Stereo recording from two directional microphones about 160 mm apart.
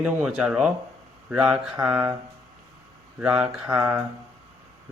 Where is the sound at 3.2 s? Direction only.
5° right (ahead or behind).